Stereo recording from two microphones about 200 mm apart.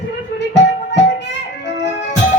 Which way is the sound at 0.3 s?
60° left (ahead or behind).